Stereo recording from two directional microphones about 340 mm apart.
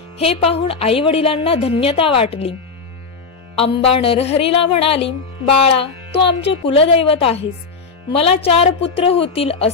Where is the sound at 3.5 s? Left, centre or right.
Centre.